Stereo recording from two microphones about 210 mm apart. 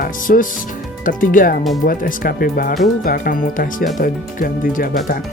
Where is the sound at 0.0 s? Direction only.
40° left (ahead or behind).